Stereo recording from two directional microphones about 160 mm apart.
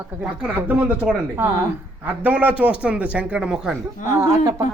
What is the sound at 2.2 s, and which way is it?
A man's voice, 10° right (ahead or behind).